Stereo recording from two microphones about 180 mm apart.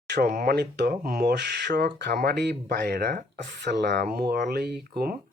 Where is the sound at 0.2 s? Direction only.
50° right (ahead or behind).